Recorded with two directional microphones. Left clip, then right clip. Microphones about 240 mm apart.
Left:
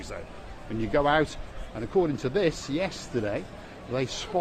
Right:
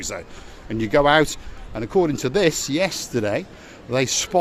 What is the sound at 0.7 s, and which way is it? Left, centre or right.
Speech, right.